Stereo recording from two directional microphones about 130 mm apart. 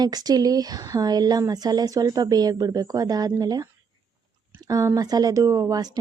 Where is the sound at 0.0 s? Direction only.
30° right (ahead or behind).